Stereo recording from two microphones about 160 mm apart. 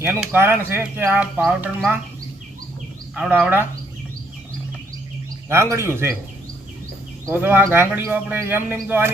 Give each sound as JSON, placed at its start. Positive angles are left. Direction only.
{"t": 0.0, "sound": "speech", "side_deg": -15}
{"t": 3.2, "sound": "speech", "side_deg": -10}
{"t": 5.5, "sound": "speech", "side_deg": -15}
{"t": 7.3, "sound": "speech", "side_deg": -10}